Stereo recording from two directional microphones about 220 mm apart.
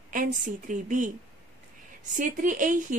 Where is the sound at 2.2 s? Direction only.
35° right (ahead or behind).